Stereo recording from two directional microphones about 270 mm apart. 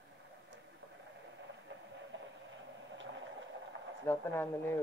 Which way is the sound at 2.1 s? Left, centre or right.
Right.